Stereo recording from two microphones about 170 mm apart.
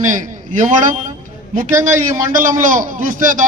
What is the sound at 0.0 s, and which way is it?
A man's voice, 50° right (ahead or behind).